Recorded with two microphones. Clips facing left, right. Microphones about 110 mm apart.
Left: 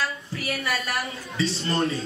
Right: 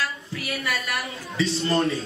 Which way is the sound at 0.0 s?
30° left (ahead or behind).